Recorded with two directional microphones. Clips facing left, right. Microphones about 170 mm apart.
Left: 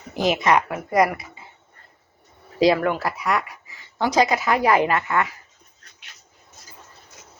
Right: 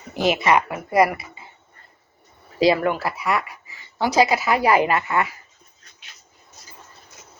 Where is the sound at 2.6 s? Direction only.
5° right (ahead or behind).